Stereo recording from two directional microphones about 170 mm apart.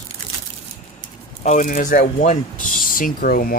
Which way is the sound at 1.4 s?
45° left (ahead or behind).